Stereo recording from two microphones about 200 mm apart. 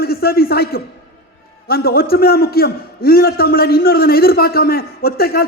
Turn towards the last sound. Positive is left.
turn(degrees=50)  # may be behind; listen again after turning